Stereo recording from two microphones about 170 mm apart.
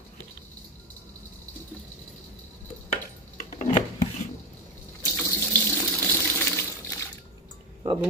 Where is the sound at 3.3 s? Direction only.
45° left (ahead or behind).